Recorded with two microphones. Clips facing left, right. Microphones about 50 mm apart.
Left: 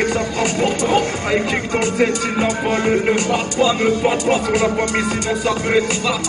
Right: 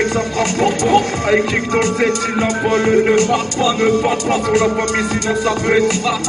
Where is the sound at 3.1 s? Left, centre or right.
Left.